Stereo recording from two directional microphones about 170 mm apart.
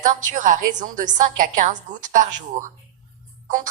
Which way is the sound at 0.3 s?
50° right (ahead or behind).